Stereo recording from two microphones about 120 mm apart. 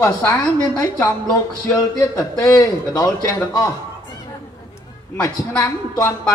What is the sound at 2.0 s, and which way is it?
A man's voice, 25° left (ahead or behind).